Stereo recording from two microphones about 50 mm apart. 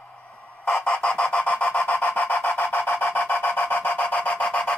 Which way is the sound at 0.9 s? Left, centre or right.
Centre.